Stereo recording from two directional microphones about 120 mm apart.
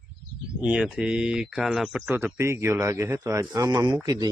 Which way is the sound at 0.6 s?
5° right (ahead or behind).